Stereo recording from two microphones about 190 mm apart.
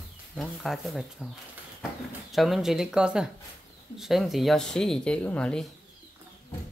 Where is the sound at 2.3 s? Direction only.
Centre (ahead or behind).